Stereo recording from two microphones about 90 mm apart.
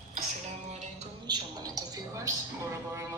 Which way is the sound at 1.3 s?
45° right (ahead or behind).